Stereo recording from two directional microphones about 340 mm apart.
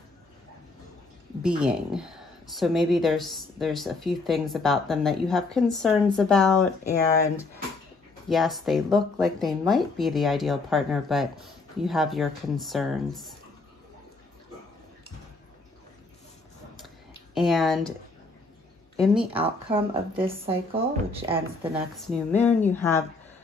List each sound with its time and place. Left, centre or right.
1.4 s a woman's voice: centre
8.3 s a woman's voice: centre
16.8 s a sound: centre
18.9 s a woman's voice: centre
19.3 s speech: centre
21.9 s a woman's voice: centre